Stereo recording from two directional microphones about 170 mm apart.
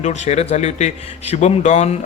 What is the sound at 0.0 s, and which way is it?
A man's voice, 40° left (ahead or behind).